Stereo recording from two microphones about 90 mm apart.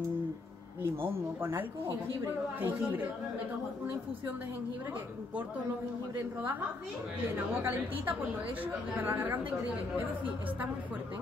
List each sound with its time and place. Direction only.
1.0 s a woman's voice: 25° right (ahead or behind)
7.3 s a woman's voice: 20° right (ahead or behind)